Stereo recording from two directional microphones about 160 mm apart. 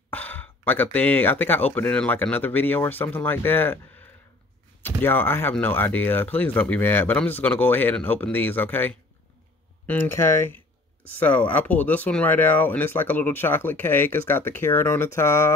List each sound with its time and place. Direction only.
0.1 s speech: 10° left (ahead or behind)
4.8 s speech: 10° left (ahead or behind)